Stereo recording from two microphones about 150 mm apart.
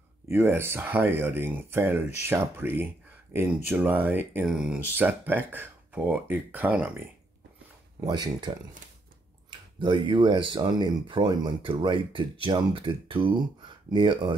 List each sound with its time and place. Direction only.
0.3 s speech: 15° right (ahead or behind)
8.0 s speech: 30° right (ahead or behind)
9.5 s speech: 30° right (ahead or behind)